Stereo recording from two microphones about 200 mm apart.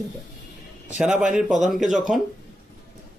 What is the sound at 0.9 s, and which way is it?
Speech, 5° right (ahead or behind).